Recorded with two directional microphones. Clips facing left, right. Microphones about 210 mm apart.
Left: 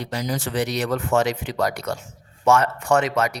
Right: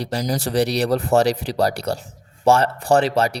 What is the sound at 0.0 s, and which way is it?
Speech, 35° right (ahead or behind).